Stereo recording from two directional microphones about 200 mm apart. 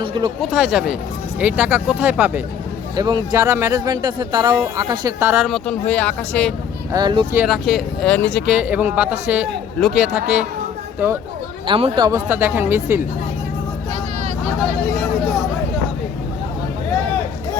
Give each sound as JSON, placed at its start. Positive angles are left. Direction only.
{"t": 0.0, "sound": "a sound", "side_deg": -25}
{"t": 0.4, "sound": "speech", "side_deg": 0}
{"t": 5.5, "sound": "speech", "side_deg": 5}
{"t": 6.9, "sound": "speech", "side_deg": -20}
{"t": 7.3, "sound": "speech", "side_deg": 0}
{"t": 11.6, "sound": "speech", "side_deg": -25}